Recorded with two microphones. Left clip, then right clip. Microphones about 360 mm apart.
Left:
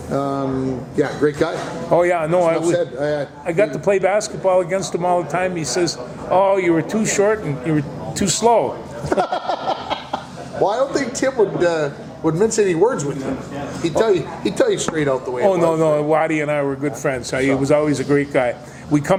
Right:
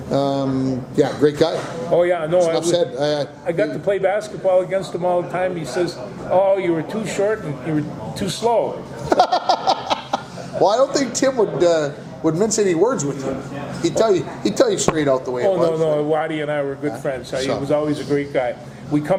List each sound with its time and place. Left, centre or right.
0.1 s a man's voice: right
2.0 s a man's voice: left
2.6 s a man's voice: right
3.4 s a man's voice: left
9.0 s a sound: right
10.6 s a man's voice: centre
15.8 s a man's voice: left